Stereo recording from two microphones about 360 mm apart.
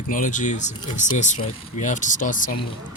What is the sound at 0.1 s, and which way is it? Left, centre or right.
Speech, left.